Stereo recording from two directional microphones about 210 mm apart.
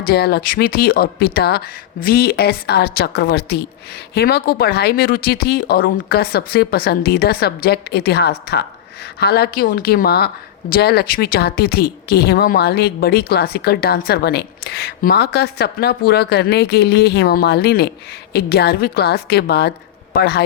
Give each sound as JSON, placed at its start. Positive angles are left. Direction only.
{"t": 0.0, "sound": "a woman's voice", "side_deg": 50}